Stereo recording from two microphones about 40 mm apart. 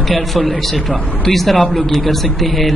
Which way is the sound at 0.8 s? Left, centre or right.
Centre.